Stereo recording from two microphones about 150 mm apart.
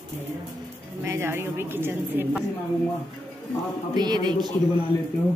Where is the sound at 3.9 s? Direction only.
30° right (ahead or behind).